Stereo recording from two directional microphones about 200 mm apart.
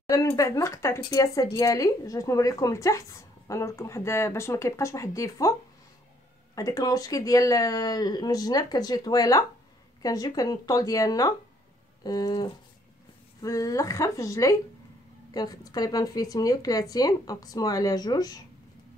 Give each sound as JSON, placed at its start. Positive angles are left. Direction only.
{"t": 0.1, "sound": "speech", "side_deg": 15}
{"t": 6.5, "sound": "speech", "side_deg": 15}